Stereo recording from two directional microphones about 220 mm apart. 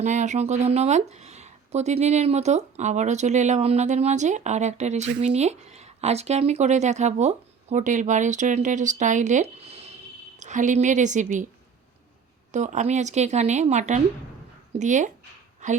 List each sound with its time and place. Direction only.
0.0 s speech: 30° right (ahead or behind)
12.5 s a woman's voice: 35° right (ahead or behind)